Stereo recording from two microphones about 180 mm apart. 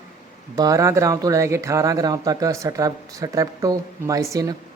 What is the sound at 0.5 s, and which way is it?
A man's voice, 20° right (ahead or behind).